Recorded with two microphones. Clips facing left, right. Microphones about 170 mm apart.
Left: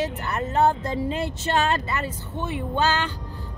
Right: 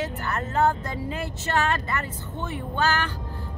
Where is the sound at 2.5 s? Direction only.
25° left (ahead or behind).